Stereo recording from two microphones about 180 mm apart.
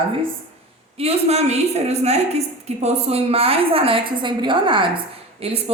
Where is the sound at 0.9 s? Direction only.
35° right (ahead or behind).